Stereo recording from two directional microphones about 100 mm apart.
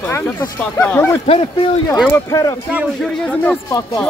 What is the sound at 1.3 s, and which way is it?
Speech, 90° left.